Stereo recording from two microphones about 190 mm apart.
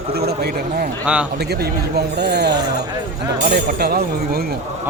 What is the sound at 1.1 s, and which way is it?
Speech, 5° right (ahead or behind).